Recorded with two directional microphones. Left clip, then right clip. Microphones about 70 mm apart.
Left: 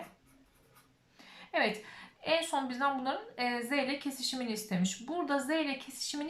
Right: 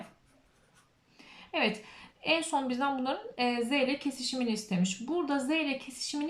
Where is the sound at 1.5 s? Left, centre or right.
Right.